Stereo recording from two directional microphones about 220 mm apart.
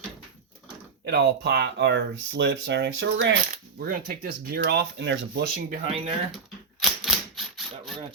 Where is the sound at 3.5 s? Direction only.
40° right (ahead or behind).